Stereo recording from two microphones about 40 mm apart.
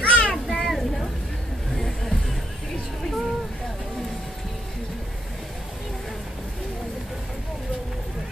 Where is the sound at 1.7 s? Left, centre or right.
Centre.